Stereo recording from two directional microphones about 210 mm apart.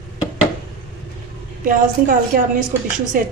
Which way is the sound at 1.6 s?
40° right (ahead or behind).